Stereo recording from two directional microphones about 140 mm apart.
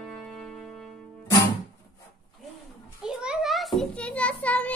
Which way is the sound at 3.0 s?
5° right (ahead or behind).